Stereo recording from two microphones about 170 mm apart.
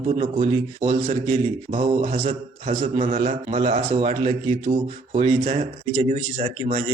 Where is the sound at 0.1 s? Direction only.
35° right (ahead or behind).